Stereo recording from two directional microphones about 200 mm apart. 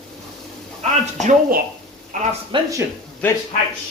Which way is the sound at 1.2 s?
40° right (ahead or behind).